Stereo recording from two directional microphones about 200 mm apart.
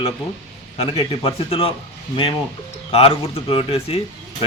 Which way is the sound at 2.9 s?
30° left (ahead or behind).